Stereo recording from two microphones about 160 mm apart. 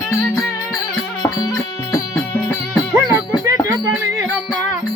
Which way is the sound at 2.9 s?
20° right (ahead or behind).